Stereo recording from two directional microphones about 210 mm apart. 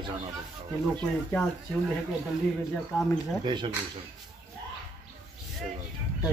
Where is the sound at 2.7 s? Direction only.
5° left (ahead or behind).